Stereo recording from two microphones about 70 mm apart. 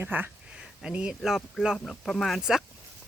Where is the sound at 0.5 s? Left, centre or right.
Centre.